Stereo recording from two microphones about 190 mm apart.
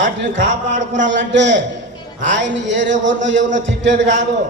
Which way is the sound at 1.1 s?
70° right (ahead or behind).